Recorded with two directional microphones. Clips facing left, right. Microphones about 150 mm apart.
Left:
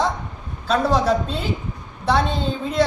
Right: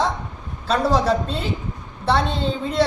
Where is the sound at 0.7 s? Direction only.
Centre (ahead or behind).